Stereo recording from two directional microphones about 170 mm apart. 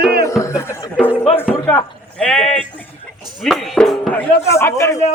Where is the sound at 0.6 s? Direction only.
15° left (ahead or behind).